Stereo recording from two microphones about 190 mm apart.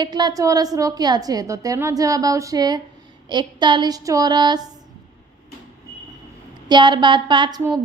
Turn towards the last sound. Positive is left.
turn(degrees=-25)  # may be behind; listen again after turning